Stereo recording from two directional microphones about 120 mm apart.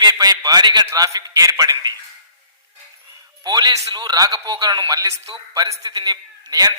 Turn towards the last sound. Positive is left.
turn(degrees=-35)  # may be behind; listen again after turning